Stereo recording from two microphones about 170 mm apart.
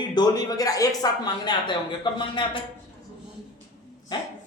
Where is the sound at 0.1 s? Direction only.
25° left (ahead or behind).